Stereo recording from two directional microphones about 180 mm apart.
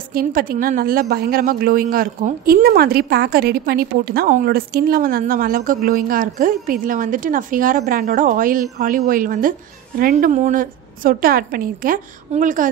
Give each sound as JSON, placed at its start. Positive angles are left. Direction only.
{"t": 0.1, "sound": "a woman's voice", "side_deg": -55}